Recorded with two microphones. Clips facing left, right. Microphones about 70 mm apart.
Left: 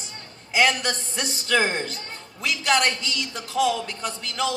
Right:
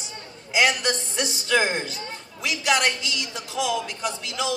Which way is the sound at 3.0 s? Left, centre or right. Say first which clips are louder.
Even; left.